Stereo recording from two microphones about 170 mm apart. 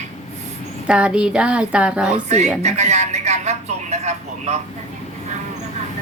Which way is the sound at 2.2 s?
40° right (ahead or behind).